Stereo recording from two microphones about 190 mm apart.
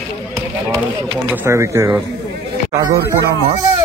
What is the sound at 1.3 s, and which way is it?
Speech, 15° right (ahead or behind).